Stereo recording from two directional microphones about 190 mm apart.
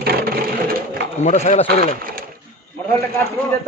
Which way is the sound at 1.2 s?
40° left (ahead or behind).